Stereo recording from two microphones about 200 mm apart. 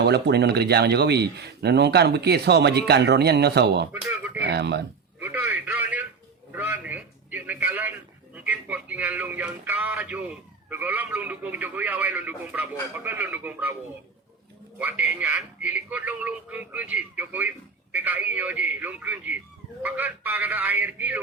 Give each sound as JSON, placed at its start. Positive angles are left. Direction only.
{"t": 0.0, "sound": "speech", "side_deg": -55}
{"t": 3.9, "sound": "a sound", "side_deg": -5}
{"t": 4.4, "sound": "speech", "side_deg": -55}
{"t": 5.2, "sound": "a sound", "side_deg": -10}
{"t": 8.4, "sound": "speech", "side_deg": -10}
{"t": 14.8, "sound": "speech", "side_deg": -10}